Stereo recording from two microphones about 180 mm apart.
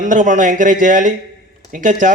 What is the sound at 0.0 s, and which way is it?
A man's voice, 45° right (ahead or behind).